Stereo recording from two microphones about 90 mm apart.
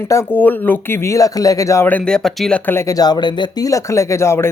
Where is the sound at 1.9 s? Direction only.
15° left (ahead or behind).